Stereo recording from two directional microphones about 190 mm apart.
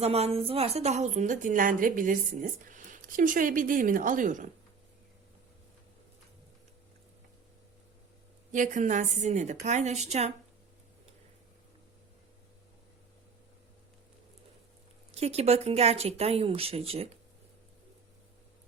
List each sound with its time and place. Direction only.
0.0 s a woman's voice: 30° right (ahead or behind)
8.5 s speech: 40° right (ahead or behind)
15.1 s speech: 35° right (ahead or behind)